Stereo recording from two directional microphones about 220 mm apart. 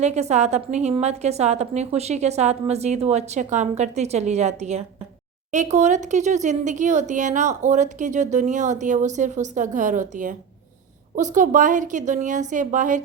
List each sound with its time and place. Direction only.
0.0 s speech: 30° right (ahead or behind)